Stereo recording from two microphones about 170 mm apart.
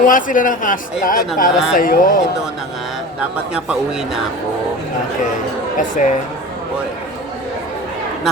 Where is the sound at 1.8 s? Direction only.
55° left (ahead or behind).